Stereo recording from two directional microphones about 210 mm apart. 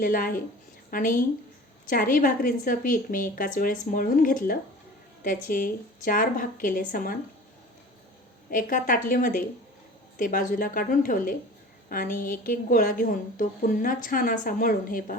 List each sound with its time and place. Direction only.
0.0 s a woman's voice: 40° left (ahead or behind)
8.4 s a woman's voice: 40° left (ahead or behind)